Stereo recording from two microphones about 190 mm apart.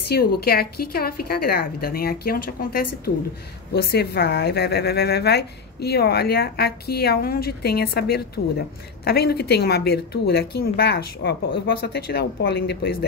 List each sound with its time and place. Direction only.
0.1 s a woman's voice: 55° left (ahead or behind)